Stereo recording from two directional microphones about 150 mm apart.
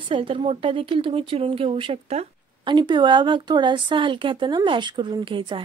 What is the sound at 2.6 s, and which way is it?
Speech, 30° right (ahead or behind).